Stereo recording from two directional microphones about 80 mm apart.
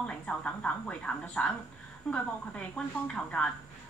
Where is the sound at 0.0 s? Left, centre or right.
Centre.